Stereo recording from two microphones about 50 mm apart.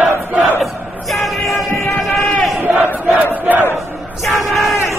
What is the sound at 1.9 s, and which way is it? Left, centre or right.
Run, centre.